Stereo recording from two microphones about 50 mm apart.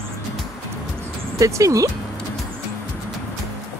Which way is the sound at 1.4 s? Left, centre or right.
Right.